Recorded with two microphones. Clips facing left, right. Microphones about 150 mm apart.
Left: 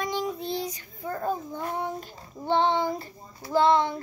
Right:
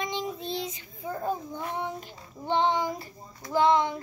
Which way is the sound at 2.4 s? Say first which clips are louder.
Left 2 dB; 15° right (ahead or behind).